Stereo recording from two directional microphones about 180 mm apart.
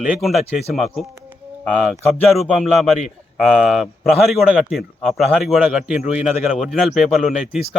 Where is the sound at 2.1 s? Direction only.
Centre (ahead or behind).